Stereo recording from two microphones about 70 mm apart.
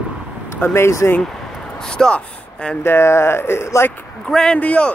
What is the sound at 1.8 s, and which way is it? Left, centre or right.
Speech, centre.